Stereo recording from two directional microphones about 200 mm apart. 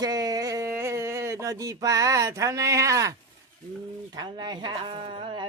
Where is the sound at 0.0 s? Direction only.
20° right (ahead or behind).